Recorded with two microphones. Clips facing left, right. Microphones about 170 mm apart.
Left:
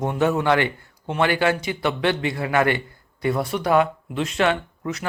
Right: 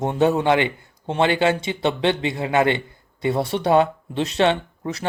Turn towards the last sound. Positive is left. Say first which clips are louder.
# even
turn(degrees=-30)  # may be behind; listen again after turning